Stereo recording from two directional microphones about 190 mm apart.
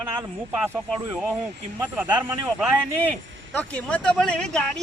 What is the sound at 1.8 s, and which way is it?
Speech, 10° right (ahead or behind).